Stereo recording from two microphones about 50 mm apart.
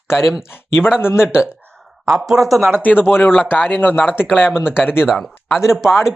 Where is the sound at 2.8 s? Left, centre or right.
Left.